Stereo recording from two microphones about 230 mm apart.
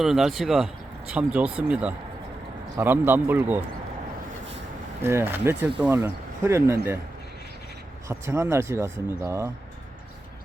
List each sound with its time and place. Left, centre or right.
0.0 s speech: centre
5.0 s speech: centre
8.0 s speech: centre